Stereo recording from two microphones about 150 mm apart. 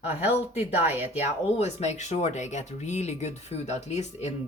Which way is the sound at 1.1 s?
45° left (ahead or behind).